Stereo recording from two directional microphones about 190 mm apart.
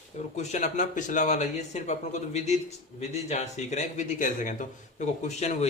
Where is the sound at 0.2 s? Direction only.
35° left (ahead or behind).